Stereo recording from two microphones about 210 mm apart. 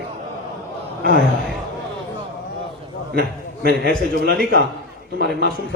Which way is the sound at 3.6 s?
50° right (ahead or behind).